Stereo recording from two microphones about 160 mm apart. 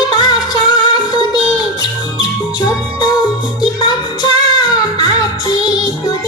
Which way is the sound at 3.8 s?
25° left (ahead or behind).